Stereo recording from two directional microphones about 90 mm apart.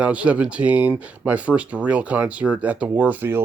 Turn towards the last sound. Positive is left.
turn(degrees=-20)  # may be behind; listen again after turning